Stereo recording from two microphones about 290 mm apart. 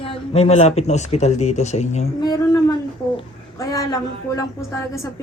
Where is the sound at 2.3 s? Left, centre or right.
Centre.